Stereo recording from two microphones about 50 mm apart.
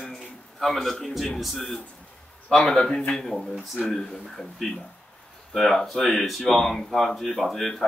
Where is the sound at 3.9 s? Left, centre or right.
Centre.